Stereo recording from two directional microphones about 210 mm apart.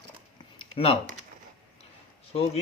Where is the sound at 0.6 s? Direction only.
25° left (ahead or behind).